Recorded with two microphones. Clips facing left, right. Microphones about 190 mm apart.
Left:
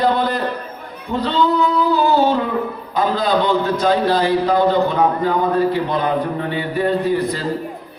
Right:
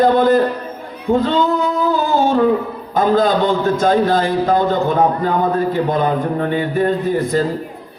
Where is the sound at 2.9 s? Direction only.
45° right (ahead or behind).